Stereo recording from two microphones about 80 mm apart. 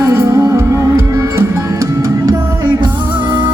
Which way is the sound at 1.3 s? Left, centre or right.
Right.